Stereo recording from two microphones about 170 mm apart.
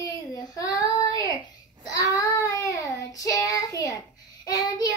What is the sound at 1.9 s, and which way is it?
Child singing, 20° left (ahead or behind).